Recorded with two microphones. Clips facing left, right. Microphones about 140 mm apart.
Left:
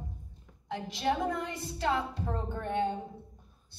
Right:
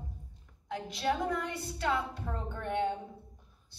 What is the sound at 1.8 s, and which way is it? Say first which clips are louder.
Speech: left 2 dB; 25° left (ahead or behind).